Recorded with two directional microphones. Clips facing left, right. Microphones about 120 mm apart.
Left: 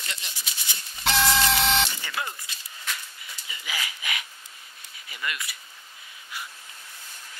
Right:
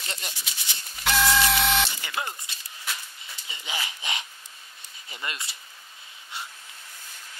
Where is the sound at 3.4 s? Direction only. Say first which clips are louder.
Right 1 dB; 25° right (ahead or behind).